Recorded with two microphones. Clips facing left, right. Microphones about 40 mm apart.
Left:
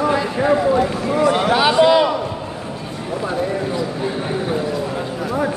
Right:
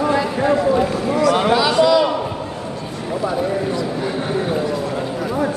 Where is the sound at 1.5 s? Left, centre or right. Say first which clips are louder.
Left 4 dB; left.